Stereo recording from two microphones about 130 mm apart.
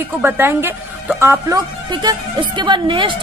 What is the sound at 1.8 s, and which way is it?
A woman's voice, 35° right (ahead or behind).